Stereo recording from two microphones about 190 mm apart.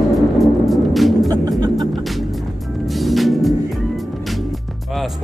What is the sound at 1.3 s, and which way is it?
Music, 20° right (ahead or behind).